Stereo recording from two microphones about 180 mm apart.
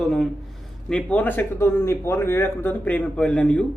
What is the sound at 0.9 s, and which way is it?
A man's voice, 5° left (ahead or behind).